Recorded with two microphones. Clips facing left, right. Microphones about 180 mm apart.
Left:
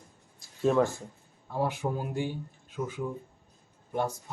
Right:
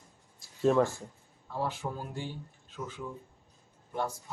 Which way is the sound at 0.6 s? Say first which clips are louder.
Left 1 dB; centre (ahead or behind).